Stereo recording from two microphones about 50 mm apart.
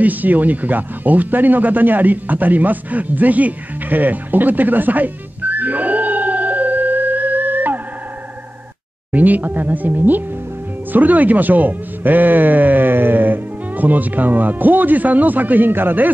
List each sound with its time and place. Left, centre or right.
0.0 s speech: right
9.1 s a man's voice: right